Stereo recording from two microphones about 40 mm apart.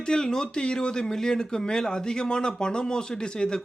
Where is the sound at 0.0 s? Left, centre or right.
Centre.